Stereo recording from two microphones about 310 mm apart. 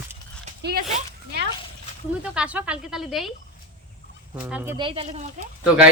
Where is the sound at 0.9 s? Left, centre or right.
Right.